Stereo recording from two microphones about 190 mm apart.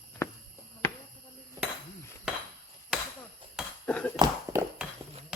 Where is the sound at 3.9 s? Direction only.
5° left (ahead or behind).